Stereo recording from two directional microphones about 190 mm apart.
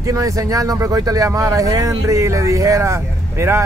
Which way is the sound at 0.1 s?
15° right (ahead or behind).